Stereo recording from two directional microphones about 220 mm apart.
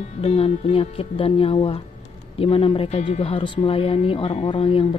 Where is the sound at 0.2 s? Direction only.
25° left (ahead or behind).